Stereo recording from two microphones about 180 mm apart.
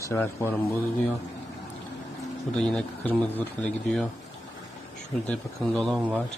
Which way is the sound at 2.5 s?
5° left (ahead or behind).